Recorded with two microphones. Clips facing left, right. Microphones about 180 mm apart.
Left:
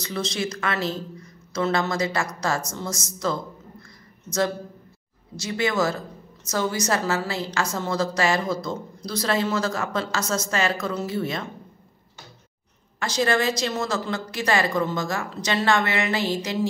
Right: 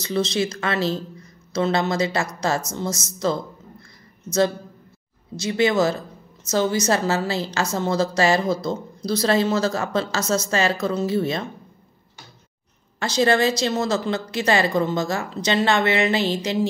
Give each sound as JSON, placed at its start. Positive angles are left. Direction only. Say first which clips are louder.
{"t": 0.0, "sound": "speech", "louder": "right 5 dB", "side_deg": -25}
{"t": 5.4, "sound": "speech", "louder": "right 4 dB", "side_deg": -25}
{"t": 13.0, "sound": "speech", "louder": "right 4 dB", "side_deg": -25}